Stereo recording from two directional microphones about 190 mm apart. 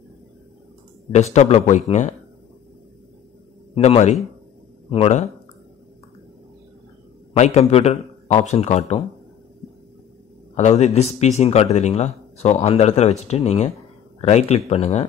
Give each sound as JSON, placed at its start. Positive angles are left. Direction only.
{"t": 1.1, "sound": "speech", "side_deg": 35}
{"t": 3.7, "sound": "speech", "side_deg": 30}
{"t": 7.3, "sound": "speech", "side_deg": 35}
{"t": 10.5, "sound": "a man's voice", "side_deg": 35}